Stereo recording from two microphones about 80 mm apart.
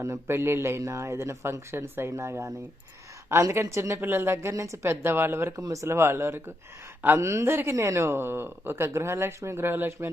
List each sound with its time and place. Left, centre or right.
0.0 s speech: right
5.5 s speech: right